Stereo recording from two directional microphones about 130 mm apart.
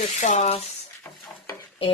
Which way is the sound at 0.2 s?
65° left (ahead or behind).